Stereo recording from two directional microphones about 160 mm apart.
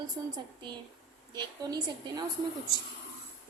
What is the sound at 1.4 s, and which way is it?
Speech, 25° right (ahead or behind).